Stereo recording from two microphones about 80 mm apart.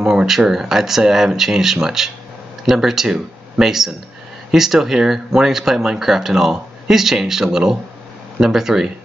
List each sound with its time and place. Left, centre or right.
0.0 s speech: centre